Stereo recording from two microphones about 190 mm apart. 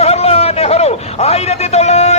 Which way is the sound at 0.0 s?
35° left (ahead or behind).